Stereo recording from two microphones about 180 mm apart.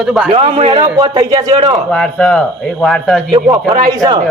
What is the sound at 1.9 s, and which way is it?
A woman's voice, 5° left (ahead or behind).